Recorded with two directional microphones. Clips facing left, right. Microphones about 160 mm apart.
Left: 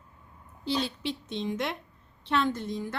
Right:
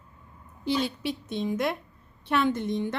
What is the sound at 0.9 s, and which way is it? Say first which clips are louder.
A woman's voice: right 3 dB; 10° right (ahead or behind).